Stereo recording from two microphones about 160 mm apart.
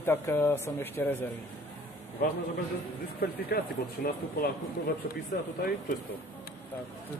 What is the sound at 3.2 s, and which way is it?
Speech, 70° left (ahead or behind).